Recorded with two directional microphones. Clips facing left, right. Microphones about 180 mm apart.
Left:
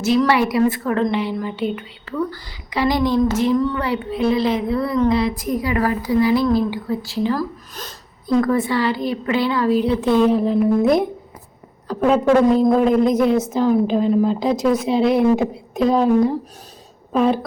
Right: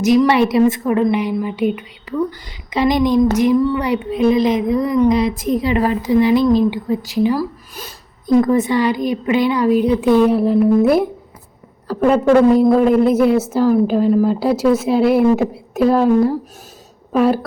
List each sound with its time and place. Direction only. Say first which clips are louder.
0.0 s a woman's voice: right 4 dB; 15° right (ahead or behind)
8.4 s a woman's voice: right 3 dB; 20° right (ahead or behind)